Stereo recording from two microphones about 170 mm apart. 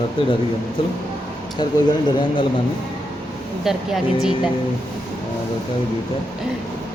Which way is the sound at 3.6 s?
Centre (ahead or behind).